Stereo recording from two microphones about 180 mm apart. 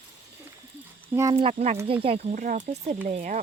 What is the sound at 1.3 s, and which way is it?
Speech, 30° right (ahead or behind).